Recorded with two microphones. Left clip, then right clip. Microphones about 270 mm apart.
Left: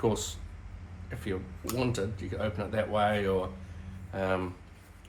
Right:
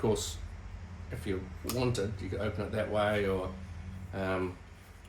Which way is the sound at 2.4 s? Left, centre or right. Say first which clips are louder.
Left 3 dB; centre.